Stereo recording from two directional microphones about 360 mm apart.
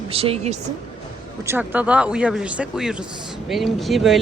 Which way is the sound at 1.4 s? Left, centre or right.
Centre.